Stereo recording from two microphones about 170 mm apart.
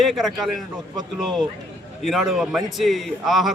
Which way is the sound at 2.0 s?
Centre (ahead or behind).